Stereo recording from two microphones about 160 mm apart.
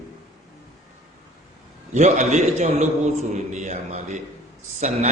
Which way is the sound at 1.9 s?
45° right (ahead or behind).